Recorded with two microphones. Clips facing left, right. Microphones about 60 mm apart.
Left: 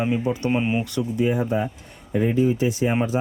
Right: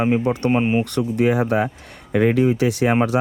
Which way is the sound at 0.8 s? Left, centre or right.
Right.